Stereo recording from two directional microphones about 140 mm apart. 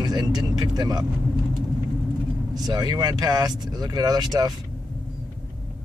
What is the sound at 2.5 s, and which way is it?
Speech, 30° right (ahead or behind).